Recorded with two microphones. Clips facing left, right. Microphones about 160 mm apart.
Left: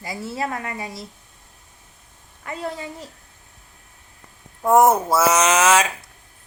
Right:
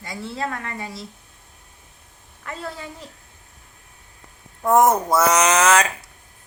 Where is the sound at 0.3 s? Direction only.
20° left (ahead or behind).